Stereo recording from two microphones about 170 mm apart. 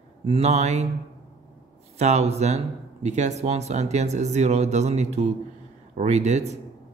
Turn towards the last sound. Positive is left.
turn(degrees=-40)  # may be behind; listen again after turning